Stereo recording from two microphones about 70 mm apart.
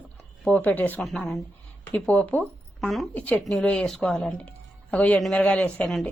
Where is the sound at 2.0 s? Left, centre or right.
Centre.